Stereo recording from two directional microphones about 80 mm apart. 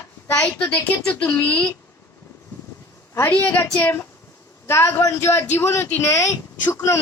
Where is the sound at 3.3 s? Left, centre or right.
Centre.